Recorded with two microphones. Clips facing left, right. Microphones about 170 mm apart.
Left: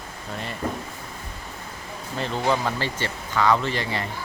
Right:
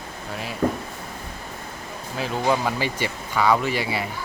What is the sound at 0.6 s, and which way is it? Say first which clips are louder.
Speech: right 7 dB; 50° right (ahead or behind).